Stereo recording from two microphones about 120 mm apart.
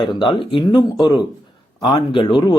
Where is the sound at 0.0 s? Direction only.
45° left (ahead or behind).